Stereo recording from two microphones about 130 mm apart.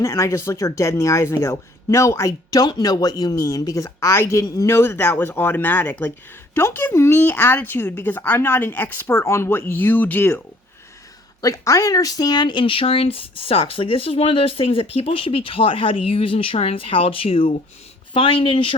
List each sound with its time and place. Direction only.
0.0 s speech: 20° left (ahead or behind)
11.3 s speech: 25° left (ahead or behind); by 18.8 s 40° left (ahead or behind)